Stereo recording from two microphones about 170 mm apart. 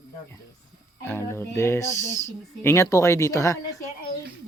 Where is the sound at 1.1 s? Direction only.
15° left (ahead or behind).